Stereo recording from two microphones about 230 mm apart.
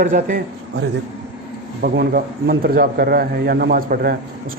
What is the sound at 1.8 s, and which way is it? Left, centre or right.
Speech, right.